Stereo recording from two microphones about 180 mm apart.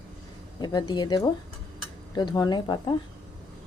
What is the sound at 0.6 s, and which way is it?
Speech, 25° left (ahead or behind).